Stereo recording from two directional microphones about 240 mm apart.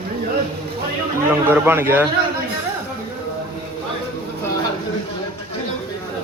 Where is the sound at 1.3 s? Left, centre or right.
Centre.